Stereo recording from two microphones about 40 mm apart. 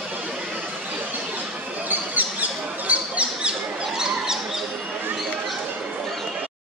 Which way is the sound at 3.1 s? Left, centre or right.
Right.